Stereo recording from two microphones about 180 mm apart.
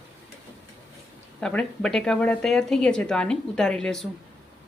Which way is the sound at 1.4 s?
5° left (ahead or behind).